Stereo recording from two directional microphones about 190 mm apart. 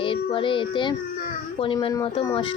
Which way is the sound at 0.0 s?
25° left (ahead or behind).